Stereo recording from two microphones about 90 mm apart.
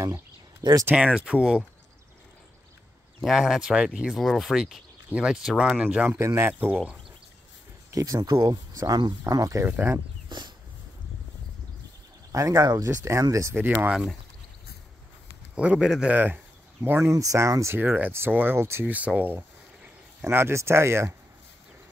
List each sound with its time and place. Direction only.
0.0 s a sound: 35° right (ahead or behind)
0.9 s speech: 10° right (ahead or behind)
3.2 s speech: 5° right (ahead or behind)
6.0 s speech: 30° right (ahead or behind)
7.9 s speech: 40° right (ahead or behind)
9.6 s speech: 25° right (ahead or behind)
12.3 s speech: 40° right (ahead or behind)
13.6 s speech: 20° right (ahead or behind)
15.5 s speech: 10° right (ahead or behind)
16.8 s speech: 25° right (ahead or behind)
17.1 s speech: 35° right (ahead or behind)
17.7 s speech: 20° right (ahead or behind)
18.9 s speech: 15° right (ahead or behind)